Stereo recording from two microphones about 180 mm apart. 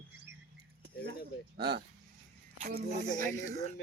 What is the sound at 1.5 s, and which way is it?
Speech, 65° right (ahead or behind).